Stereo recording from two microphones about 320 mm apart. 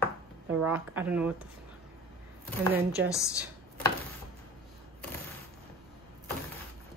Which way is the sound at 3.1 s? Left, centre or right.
Centre.